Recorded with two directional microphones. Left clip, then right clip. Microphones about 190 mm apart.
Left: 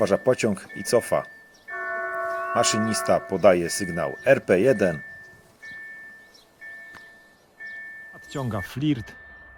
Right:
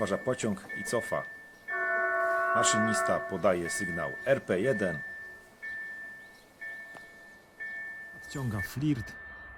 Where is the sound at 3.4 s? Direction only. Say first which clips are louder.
Left 11 dB; 30° left (ahead or behind).